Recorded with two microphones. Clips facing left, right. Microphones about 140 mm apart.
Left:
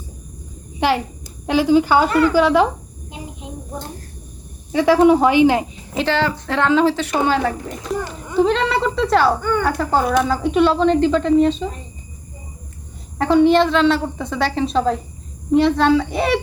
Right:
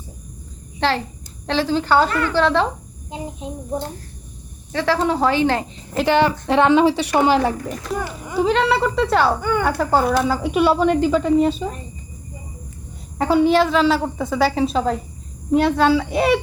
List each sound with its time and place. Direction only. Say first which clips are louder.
0.8 s speech: left 2 dB; 10° left (ahead or behind)
4.7 s speech: left 7 dB; 15° left (ahead or behind)
6.1 s a woman's voice: right 4 dB; 20° right (ahead or behind)
8.0 s speech: left 3 dB; 5° right (ahead or behind)
9.4 s speech: left 1 dB; 15° right (ahead or behind)
9.6 s speech: right 2 dB; centre (ahead or behind)
13.1 s speech: left 2 dB; 5° right (ahead or behind)